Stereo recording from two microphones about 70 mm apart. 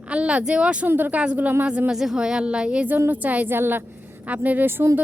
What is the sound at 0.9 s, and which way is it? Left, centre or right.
Speech, right.